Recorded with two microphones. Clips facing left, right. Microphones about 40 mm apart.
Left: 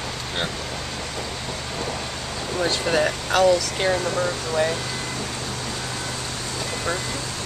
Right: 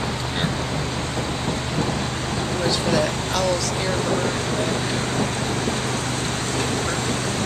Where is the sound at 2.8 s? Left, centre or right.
Left.